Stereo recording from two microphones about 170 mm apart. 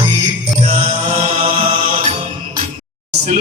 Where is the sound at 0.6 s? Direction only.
40° right (ahead or behind).